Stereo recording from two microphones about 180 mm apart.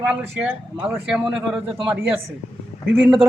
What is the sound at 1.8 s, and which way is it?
Speech, 5° right (ahead or behind).